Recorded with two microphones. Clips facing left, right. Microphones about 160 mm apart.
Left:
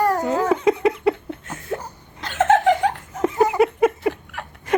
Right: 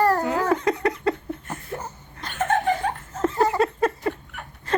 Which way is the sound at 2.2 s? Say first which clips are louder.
Left 6 dB; 90° left.